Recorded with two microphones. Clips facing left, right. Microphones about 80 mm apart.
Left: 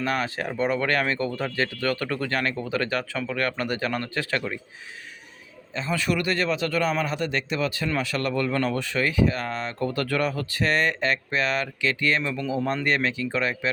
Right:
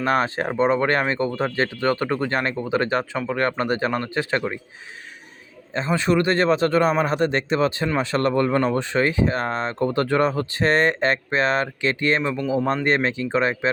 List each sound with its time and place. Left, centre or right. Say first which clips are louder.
0.0 s speech: right 5 dB; right
5.7 s speech: right 6 dB; right